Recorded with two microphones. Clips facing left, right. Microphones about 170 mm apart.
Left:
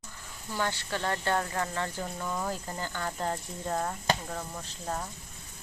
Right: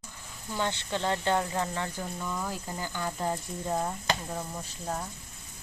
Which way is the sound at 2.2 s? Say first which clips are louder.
Left 1 dB; 10° left (ahead or behind).